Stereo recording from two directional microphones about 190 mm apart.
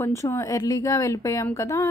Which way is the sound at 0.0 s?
15° left (ahead or behind).